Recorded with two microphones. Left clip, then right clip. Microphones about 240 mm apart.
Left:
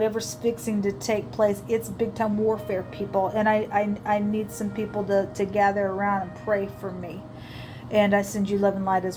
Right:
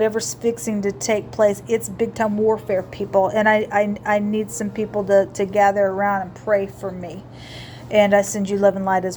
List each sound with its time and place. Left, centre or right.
0.0 s a woman's voice: right